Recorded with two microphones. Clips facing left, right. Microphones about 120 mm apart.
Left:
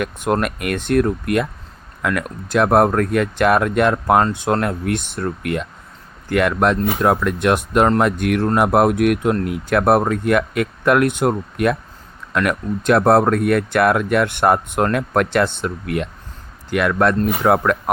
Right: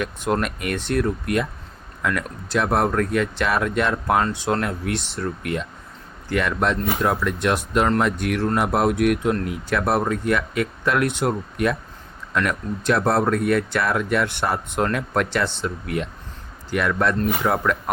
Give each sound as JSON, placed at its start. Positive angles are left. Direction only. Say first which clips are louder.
{"t": 0.4, "sound": "speech", "louder": "left 4 dB", "side_deg": 55}